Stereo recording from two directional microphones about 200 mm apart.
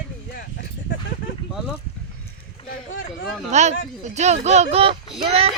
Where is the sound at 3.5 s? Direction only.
35° right (ahead or behind).